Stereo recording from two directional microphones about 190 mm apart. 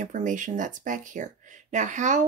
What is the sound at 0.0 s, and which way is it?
Speech, 40° right (ahead or behind).